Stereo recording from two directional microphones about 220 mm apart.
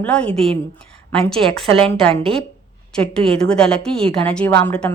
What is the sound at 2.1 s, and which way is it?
Speech, 25° right (ahead or behind).